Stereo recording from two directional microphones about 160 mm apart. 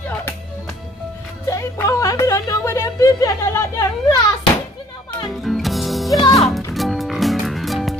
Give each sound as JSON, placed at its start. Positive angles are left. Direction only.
{"t": 1.4, "sound": "music", "side_deg": 20}
{"t": 5.4, "sound": "music", "side_deg": 0}
{"t": 6.1, "sound": "music", "side_deg": 25}
{"t": 6.7, "sound": "music", "side_deg": 0}